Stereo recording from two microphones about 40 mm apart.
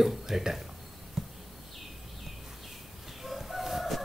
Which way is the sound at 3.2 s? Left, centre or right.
Centre.